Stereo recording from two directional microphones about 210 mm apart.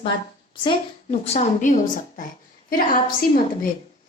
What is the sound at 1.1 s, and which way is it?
A woman's voice, 30° left (ahead or behind).